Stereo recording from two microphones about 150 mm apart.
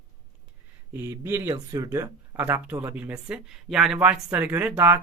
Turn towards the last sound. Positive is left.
turn(degrees=-15)  # may be behind; listen again after turning